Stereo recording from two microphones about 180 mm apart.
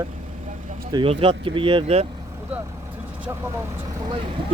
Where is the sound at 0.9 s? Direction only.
30° right (ahead or behind).